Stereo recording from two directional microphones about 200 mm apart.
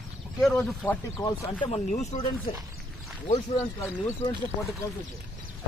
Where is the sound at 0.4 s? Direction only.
5° left (ahead or behind).